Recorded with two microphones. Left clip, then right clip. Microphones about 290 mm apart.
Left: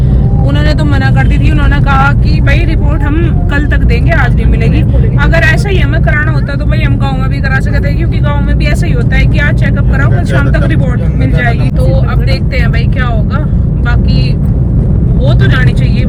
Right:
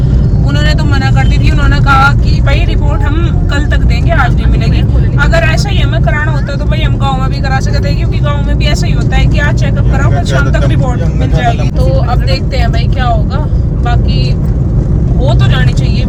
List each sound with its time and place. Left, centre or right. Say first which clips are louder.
1.9 s vehicle: right 3 dB; right